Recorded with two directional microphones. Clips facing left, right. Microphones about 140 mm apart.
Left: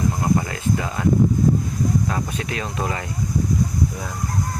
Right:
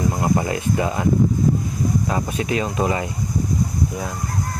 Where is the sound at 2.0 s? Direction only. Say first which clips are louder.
Right 3 dB; 15° right (ahead or behind).